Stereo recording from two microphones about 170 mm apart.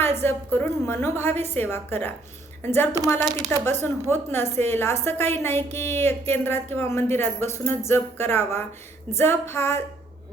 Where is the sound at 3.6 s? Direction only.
15° left (ahead or behind).